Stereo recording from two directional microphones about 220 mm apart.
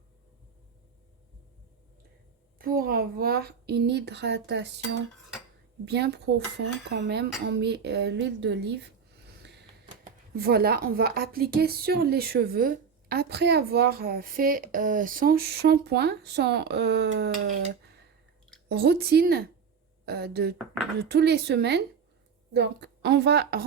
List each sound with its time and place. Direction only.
2.6 s speech: 40° right (ahead or behind)